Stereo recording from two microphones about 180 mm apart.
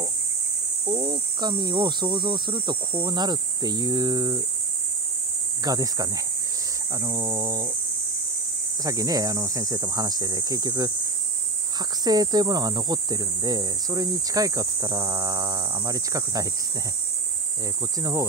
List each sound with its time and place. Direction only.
0.8 s speech: 25° right (ahead or behind)
5.6 s speech: 20° right (ahead or behind)
8.8 s speech: 20° right (ahead or behind)
12.0 s speech: 20° right (ahead or behind)
17.9 s speech: 20° right (ahead or behind)